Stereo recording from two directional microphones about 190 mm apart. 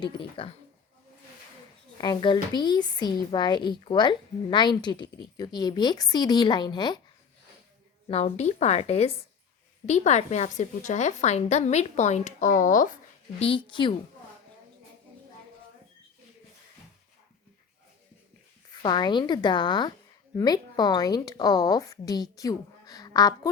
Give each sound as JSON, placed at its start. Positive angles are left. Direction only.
{"t": 0.0, "sound": "a woman's voice", "side_deg": 25}
{"t": 2.0, "sound": "a woman's voice", "side_deg": 25}
{"t": 8.0, "sound": "a woman's voice", "side_deg": 35}
{"t": 13.4, "sound": "a woman's voice", "side_deg": 25}
{"t": 18.7, "sound": "a woman's voice", "side_deg": 25}